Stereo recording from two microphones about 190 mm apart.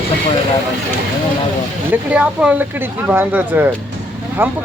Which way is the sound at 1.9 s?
5° right (ahead or behind).